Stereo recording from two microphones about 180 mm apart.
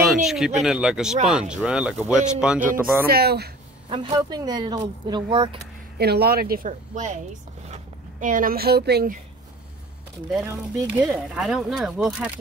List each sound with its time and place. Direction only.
0.0 s speech: centre (ahead or behind)
3.1 s speech: 60° right (ahead or behind)
3.9 s speech: 25° right (ahead or behind)
5.9 s speech: 60° right (ahead or behind)
10.3 s speech: 10° right (ahead or behind)